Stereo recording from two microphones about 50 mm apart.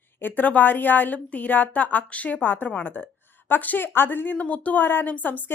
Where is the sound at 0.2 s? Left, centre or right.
Left.